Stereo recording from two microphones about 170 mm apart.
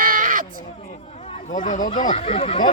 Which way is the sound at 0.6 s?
40° left (ahead or behind).